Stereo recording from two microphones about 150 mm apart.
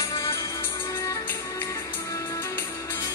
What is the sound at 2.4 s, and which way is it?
Music, 15° left (ahead or behind).